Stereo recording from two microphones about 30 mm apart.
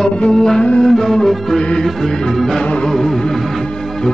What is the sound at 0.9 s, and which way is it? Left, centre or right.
Music, centre.